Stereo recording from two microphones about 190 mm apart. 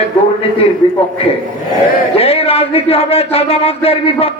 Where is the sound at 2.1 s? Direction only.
30° left (ahead or behind).